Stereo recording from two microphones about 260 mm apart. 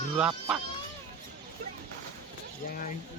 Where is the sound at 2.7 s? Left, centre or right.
Left.